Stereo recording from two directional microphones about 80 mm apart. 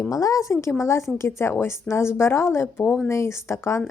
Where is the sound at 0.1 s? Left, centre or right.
Left.